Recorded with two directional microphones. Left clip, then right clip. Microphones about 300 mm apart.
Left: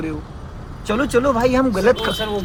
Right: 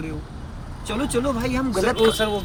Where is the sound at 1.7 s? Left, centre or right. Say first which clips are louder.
Left 2 dB; centre.